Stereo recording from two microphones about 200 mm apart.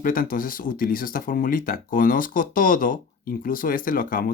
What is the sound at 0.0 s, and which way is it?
Speech, 45° left (ahead or behind).